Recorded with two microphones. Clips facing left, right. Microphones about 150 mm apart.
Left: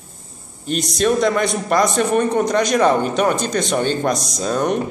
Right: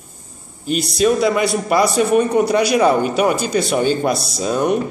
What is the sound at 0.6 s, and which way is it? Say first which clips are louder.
A man's voice: right 2 dB; 5° right (ahead or behind).